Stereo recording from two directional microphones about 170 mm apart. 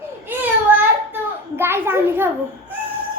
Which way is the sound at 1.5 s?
15° right (ahead or behind).